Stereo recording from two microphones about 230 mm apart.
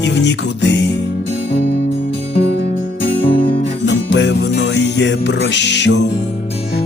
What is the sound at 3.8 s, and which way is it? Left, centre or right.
Music, left.